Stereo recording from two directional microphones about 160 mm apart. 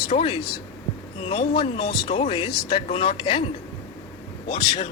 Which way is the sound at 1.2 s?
35° left (ahead or behind).